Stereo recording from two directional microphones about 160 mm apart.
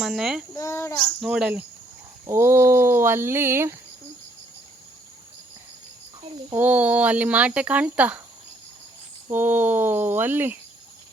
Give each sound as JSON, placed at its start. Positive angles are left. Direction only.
{"t": 0.0, "sound": "speech", "side_deg": 0}
{"t": 0.5, "sound": "a child's voice", "side_deg": 20}
{"t": 1.2, "sound": "speech", "side_deg": -5}
{"t": 2.2, "sound": "speech", "side_deg": -15}
{"t": 6.5, "sound": "speech", "side_deg": -10}
{"t": 9.3, "sound": "speech", "side_deg": -10}